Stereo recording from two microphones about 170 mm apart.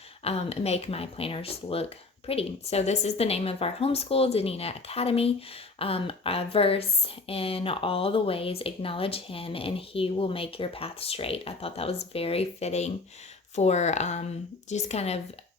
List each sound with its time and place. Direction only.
0.3 s a woman's voice: 35° left (ahead or behind)